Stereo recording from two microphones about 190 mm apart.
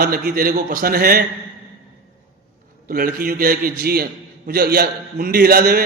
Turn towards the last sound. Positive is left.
turn(degrees=-55)  # may be behind; listen again after turning